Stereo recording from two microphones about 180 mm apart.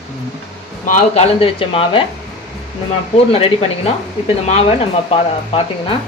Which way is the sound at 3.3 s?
35° left (ahead or behind).